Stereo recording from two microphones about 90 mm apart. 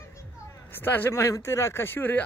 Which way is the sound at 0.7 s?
20° left (ahead or behind).